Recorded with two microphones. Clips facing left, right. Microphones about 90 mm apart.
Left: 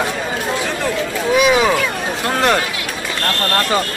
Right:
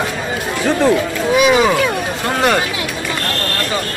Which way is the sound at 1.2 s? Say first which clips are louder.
Even; centre (ahead or behind).